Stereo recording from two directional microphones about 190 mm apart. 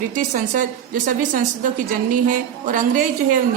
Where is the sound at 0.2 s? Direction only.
45° right (ahead or behind).